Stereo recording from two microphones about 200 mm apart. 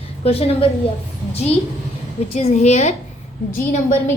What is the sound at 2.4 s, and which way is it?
Speech, 30° left (ahead or behind).